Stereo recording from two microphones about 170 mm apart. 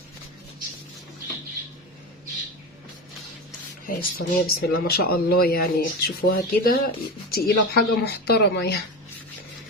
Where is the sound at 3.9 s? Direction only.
60° left (ahead or behind); by 8.7 s 75° left (ahead or behind).